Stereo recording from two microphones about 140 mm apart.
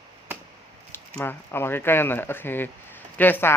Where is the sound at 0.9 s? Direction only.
15° left (ahead or behind).